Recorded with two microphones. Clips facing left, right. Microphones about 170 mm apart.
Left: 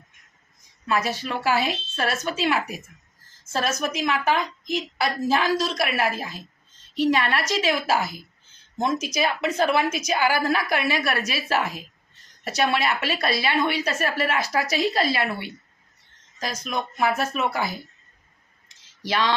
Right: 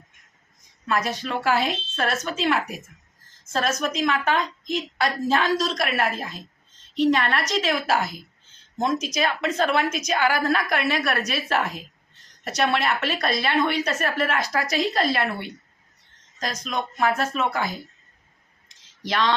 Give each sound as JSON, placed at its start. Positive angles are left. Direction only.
{"t": 0.9, "sound": "a woman's voice", "side_deg": 5}
{"t": 19.0, "sound": "a woman's voice", "side_deg": 5}